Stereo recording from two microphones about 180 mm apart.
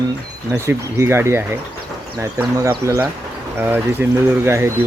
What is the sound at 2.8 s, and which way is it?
Speech, 15° right (ahead or behind).